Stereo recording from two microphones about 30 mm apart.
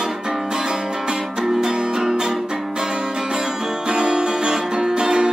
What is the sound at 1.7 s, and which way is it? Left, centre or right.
Music, right.